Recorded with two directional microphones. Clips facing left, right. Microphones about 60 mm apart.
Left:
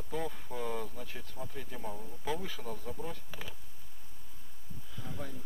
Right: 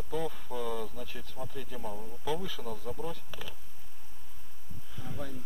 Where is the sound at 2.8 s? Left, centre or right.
Right.